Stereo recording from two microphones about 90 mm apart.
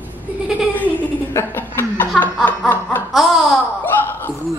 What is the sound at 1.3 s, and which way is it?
Chuckle, 25° left (ahead or behind).